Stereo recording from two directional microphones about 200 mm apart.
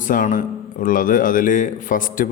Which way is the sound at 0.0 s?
40° left (ahead or behind).